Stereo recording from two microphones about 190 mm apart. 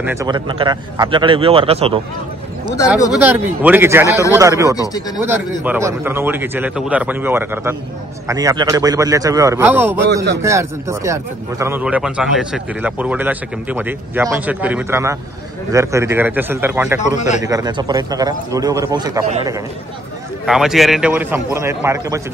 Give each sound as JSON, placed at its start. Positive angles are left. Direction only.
{"t": 0.3, "sound": "a man's voice", "side_deg": -25}
{"t": 3.1, "sound": "speech", "side_deg": -10}
{"t": 4.7, "sound": "speech", "side_deg": 20}
{"t": 5.2, "sound": "speech", "side_deg": -10}
{"t": 17.2, "sound": "speech", "side_deg": 40}
{"t": 17.5, "sound": "a man's voice", "side_deg": -20}
{"t": 20.4, "sound": "speech", "side_deg": 0}